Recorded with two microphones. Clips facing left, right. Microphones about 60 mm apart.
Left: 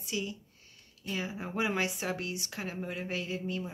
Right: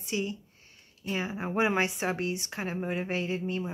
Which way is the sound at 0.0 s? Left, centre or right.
Right.